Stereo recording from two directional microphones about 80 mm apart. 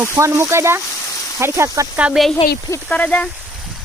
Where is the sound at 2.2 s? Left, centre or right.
Centre.